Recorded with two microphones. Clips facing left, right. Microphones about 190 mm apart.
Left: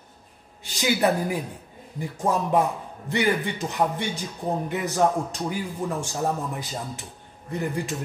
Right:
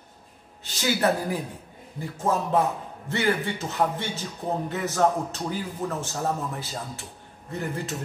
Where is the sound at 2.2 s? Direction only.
15° left (ahead or behind).